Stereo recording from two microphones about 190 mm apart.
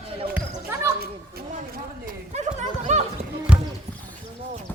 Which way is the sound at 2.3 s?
40° right (ahead or behind).